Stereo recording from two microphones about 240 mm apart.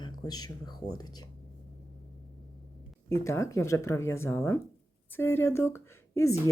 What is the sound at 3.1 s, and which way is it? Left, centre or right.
Speech, centre.